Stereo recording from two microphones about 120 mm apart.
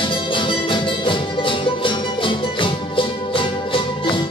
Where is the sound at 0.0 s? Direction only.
45° left (ahead or behind).